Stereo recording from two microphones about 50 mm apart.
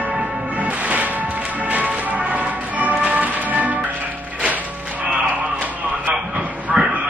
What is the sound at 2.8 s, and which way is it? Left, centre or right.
Music, right.